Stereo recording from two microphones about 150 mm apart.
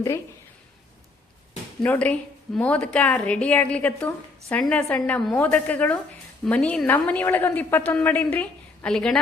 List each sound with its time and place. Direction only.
1.8 s a woman's voice: 10° left (ahead or behind)